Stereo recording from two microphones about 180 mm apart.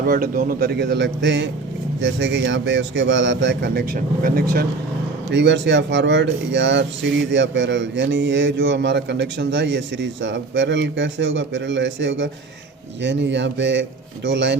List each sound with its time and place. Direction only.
0.0 s speech: 50° right (ahead or behind)
5.3 s speech: 80° right